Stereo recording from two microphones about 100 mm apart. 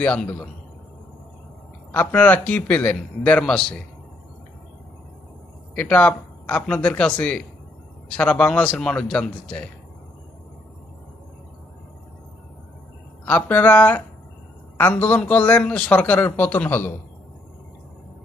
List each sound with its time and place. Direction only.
0.0 s a man's voice: 15° left (ahead or behind)
1.9 s a man's voice: 15° left (ahead or behind)
5.7 s a man's voice: 15° left (ahead or behind)
13.2 s a man's voice: 15° left (ahead or behind)